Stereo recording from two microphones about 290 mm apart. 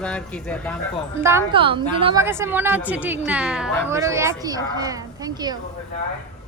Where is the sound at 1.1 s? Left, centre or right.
Centre.